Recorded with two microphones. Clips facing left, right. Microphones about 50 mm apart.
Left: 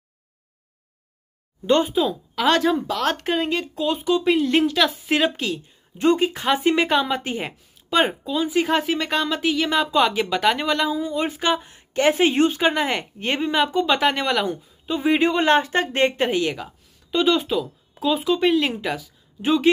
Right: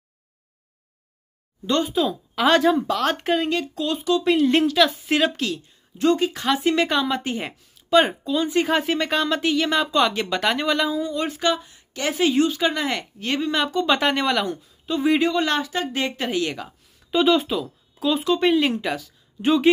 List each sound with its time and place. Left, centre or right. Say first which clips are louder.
1.7 s speech: left 4 dB; left
2.0 s a woman's voice: even; centre
4.7 s speech: right 1 dB; centre
5.9 s speech: left 1 dB; left
6.9 s a woman's voice: left 1 dB; centre
11.0 s speech: even; centre
11.6 s speech: left 8 dB; left
13.8 s a woman's voice: even; centre
15.2 s speech: left 4 dB; left
16.3 s a woman's voice: left 2 dB; centre